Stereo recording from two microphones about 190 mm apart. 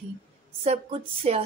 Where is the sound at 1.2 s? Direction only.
35° right (ahead or behind).